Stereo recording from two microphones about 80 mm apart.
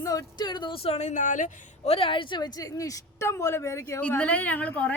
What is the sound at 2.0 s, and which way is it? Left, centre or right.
A woman's voice, left.